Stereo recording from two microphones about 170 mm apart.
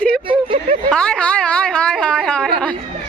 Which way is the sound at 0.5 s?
45° right (ahead or behind).